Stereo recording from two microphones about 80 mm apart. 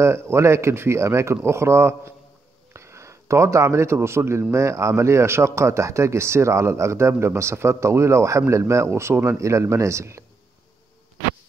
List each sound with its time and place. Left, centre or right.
0.0 s a man's voice: right